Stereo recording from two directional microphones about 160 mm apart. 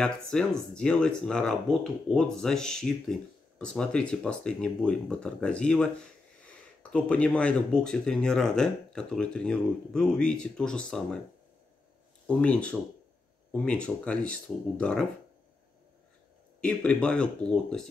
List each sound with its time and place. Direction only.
0.0 s speech: 5° left (ahead or behind)
12.3 s speech: 5° left (ahead or behind)
16.6 s speech: 5° left (ahead or behind)